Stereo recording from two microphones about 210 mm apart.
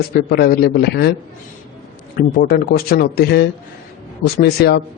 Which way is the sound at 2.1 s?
45° left (ahead or behind).